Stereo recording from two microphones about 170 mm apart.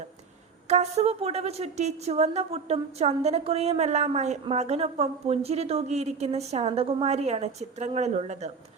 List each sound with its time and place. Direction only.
0.7 s a woman's voice: 40° right (ahead or behind)